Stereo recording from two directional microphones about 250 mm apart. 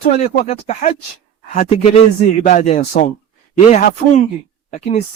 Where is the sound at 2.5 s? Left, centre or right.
Left.